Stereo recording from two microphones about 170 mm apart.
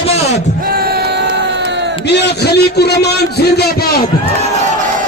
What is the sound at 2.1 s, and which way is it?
A man's voice, 75° left (ahead or behind).